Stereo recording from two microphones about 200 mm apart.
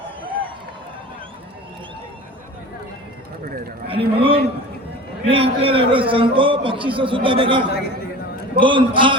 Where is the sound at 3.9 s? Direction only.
25° right (ahead or behind).